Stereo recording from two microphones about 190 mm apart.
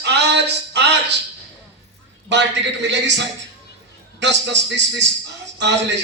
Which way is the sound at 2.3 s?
70° right (ahead or behind).